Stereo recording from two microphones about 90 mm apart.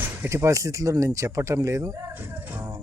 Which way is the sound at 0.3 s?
35° right (ahead or behind).